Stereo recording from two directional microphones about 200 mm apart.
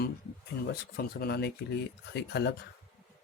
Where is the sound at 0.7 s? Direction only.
55° left (ahead or behind).